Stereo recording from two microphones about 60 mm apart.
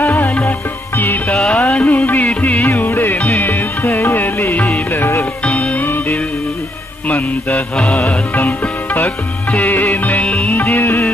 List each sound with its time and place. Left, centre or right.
0.0 s music: left
1.3 s music: centre
1.9 s music: left
5.4 s music: left
5.9 s music: left
7.7 s music: centre
8.4 s music: left
10.2 s music: centre
10.5 s music: left